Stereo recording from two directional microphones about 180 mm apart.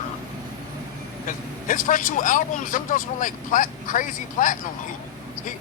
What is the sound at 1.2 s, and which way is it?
A man's voice, 45° left (ahead or behind).